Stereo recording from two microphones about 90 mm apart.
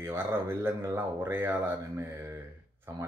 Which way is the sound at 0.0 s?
30° right (ahead or behind).